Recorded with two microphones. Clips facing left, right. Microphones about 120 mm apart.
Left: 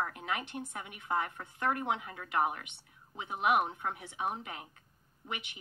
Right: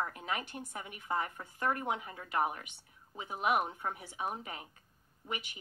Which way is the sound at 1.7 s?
45° right (ahead or behind).